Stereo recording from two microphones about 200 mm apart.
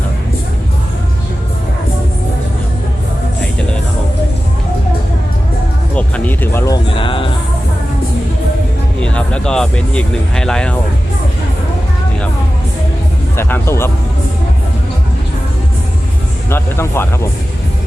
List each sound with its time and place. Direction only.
5.9 s music: 5° left (ahead or behind)
6.9 s music: 25° left (ahead or behind)
9.0 s speech: 5° left (ahead or behind)
13.3 s speech: 10° left (ahead or behind)
16.5 s music: 10° left (ahead or behind)